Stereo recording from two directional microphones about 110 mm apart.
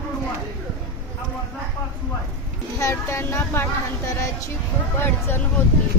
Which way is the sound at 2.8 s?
25° left (ahead or behind).